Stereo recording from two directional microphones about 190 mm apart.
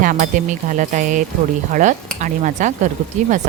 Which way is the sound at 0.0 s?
40° right (ahead or behind).